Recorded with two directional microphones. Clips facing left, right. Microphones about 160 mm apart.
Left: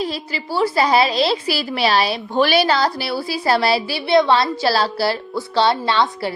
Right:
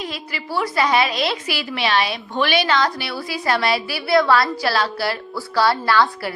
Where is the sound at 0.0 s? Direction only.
30° left (ahead or behind).